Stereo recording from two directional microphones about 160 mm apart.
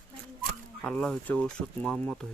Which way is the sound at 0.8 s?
5° left (ahead or behind).